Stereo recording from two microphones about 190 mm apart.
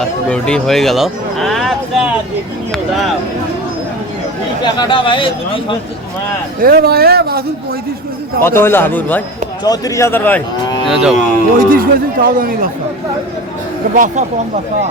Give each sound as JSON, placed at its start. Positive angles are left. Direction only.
{"t": 0.0, "sound": "speech", "side_deg": 5}
{"t": 4.6, "sound": "speech", "side_deg": 25}
{"t": 6.6, "sound": "speech", "side_deg": -55}
{"t": 8.4, "sound": "a man's voice", "side_deg": 10}
{"t": 10.8, "sound": "speech", "side_deg": 0}
{"t": 11.5, "sound": "a man's voice", "side_deg": -50}
{"t": 13.9, "sound": "speech", "side_deg": -40}